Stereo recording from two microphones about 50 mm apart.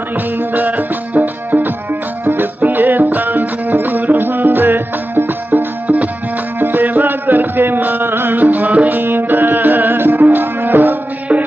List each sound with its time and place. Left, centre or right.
0.3 s music: right
8.4 s music: right